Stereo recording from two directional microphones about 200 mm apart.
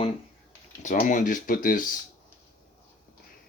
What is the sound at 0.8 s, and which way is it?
Speech, 40° left (ahead or behind).